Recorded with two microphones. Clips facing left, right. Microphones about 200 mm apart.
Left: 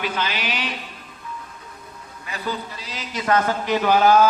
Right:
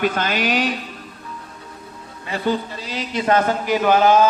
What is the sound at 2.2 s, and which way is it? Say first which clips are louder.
A man's voice: right 7 dB; 30° right (ahead or behind).